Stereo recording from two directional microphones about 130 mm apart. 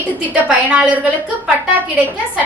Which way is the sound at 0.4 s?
10° right (ahead or behind).